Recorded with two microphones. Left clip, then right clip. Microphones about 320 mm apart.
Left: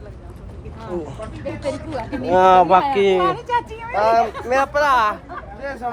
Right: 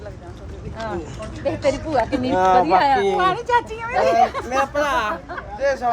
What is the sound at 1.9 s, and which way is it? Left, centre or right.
Speech, right.